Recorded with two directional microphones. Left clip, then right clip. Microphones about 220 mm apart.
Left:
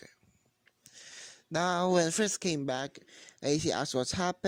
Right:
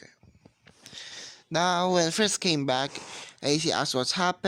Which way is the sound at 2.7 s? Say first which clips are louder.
Right 8 dB; 25° left (ahead or behind).